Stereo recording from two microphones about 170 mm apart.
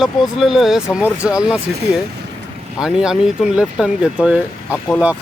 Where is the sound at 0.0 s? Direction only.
Centre (ahead or behind).